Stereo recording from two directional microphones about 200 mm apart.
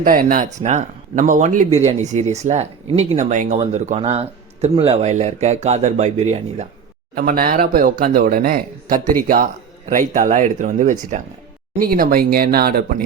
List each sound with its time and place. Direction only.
0.0 s a man's voice: 45° right (ahead or behind)
7.2 s speech: 45° right (ahead or behind)